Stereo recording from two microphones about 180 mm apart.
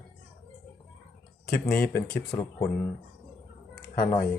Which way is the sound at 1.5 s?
5° left (ahead or behind).